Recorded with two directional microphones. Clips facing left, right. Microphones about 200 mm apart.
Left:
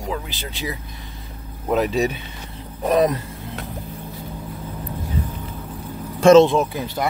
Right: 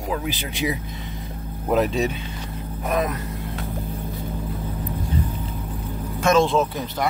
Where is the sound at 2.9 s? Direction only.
30° left (ahead or behind).